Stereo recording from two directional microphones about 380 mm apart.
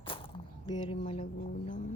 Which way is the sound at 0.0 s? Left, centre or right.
Centre.